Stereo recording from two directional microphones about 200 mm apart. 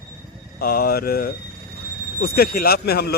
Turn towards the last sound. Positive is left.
turn(degrees=50)  # may be behind; listen again after turning